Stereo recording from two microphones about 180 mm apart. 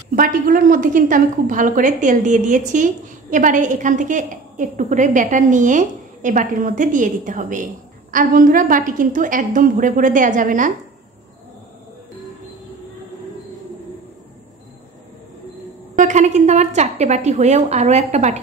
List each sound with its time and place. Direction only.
0.1 s a woman's voice: 50° right (ahead or behind)
16.0 s a woman's voice: 40° right (ahead or behind)